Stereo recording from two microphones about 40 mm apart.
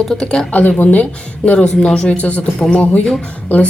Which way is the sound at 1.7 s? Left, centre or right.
Centre.